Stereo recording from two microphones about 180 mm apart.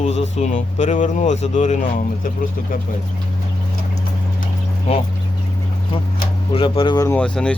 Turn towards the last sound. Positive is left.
turn(degrees=5)  # may be behind; listen again after turning